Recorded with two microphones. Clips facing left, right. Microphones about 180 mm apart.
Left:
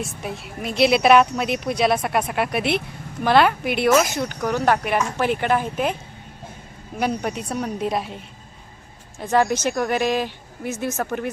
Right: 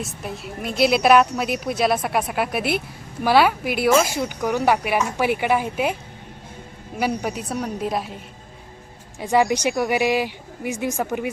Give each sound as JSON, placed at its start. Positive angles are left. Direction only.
{"t": 0.0, "sound": "a woman's voice", "side_deg": 0}
{"t": 7.0, "sound": "a woman's voice", "side_deg": -5}
{"t": 9.1, "sound": "speech", "side_deg": -15}